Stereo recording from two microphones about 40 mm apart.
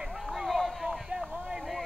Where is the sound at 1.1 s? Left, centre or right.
Right.